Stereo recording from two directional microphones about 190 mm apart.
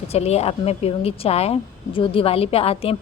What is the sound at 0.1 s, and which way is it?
A woman's voice, 35° left (ahead or behind).